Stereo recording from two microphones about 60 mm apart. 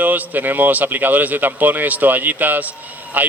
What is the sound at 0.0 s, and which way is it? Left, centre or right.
A man's voice, right.